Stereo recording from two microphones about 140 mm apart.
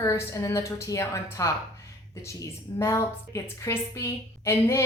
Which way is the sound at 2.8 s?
20° left (ahead or behind).